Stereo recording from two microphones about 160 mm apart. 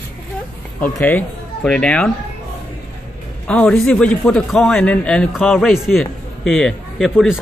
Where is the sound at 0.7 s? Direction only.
10° left (ahead or behind).